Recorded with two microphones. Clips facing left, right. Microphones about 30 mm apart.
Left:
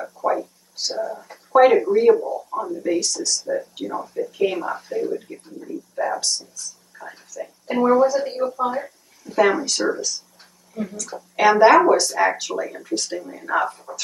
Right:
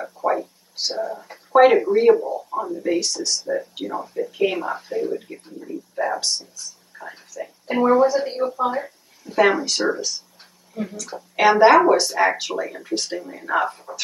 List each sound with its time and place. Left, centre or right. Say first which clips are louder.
0.0 s speech: even; right
5.7 s a sound: even; centre
10.7 s a woman's voice: even; centre